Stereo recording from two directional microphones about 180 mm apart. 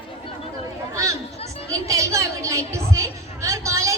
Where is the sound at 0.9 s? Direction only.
15° right (ahead or behind).